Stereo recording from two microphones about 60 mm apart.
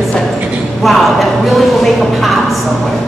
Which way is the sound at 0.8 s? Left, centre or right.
Centre.